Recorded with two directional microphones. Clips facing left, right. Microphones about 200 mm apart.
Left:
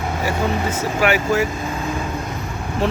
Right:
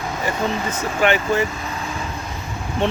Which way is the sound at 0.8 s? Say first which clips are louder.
Right 1 dB; 5° left (ahead or behind).